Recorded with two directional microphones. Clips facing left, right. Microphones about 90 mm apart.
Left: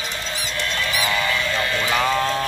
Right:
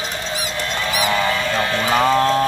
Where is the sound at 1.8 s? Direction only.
35° right (ahead or behind).